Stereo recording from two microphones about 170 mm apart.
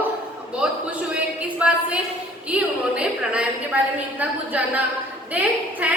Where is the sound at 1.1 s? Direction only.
5° right (ahead or behind).